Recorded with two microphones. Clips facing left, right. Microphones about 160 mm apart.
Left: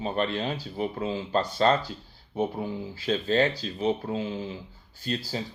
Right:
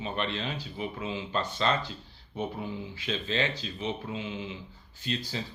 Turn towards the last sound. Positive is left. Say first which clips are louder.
# left 3 dB
turn(degrees=40)  # may be behind; listen again after turning